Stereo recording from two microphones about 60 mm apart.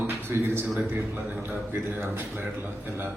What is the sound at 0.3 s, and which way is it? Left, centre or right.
Speech, right.